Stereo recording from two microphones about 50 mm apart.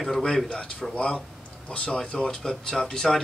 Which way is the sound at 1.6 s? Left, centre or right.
Left.